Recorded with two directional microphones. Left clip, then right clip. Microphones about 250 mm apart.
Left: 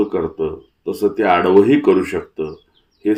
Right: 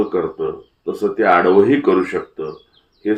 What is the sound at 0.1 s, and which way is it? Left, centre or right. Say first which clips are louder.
Speech: even; left.